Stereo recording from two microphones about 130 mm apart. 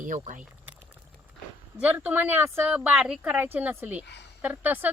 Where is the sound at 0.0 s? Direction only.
75° right (ahead or behind).